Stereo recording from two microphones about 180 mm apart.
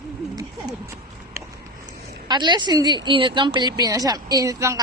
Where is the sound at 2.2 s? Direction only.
25° right (ahead or behind).